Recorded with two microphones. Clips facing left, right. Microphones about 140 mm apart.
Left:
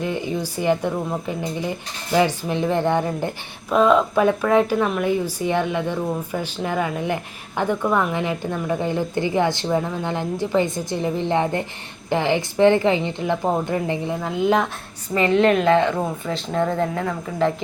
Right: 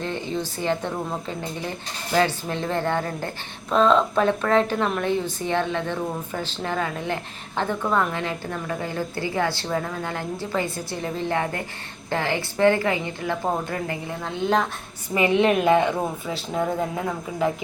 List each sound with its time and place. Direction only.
0.0 s a woman's voice: 10° left (ahead or behind)
14.2 s a woman's voice: 5° left (ahead or behind)
15.1 s speech: 10° right (ahead or behind)